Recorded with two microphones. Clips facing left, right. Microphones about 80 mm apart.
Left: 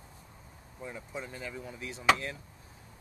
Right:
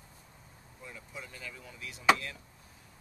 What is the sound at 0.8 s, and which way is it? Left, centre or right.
Speech, left.